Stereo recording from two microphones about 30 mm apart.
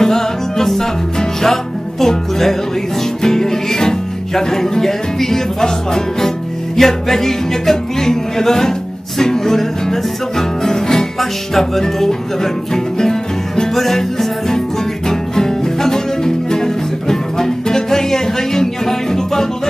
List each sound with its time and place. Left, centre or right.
0.0 s music: centre
13.7 s music: centre
15.0 s music: centre